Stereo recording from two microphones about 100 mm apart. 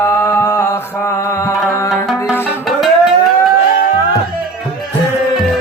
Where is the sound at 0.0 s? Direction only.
30° left (ahead or behind).